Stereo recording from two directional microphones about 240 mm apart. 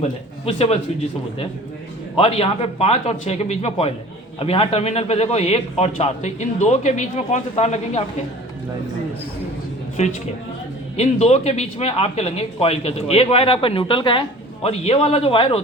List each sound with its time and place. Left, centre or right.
0.0 s a man's voice: left
2.1 s speech: left
10.0 s speech: left